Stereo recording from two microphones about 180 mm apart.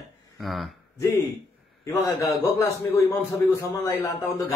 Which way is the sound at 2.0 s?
15° left (ahead or behind).